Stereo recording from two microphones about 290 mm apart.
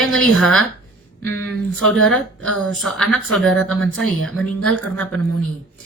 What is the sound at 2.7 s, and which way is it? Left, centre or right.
Speech, centre.